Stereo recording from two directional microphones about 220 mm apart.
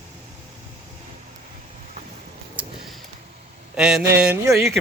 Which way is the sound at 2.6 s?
5° right (ahead or behind).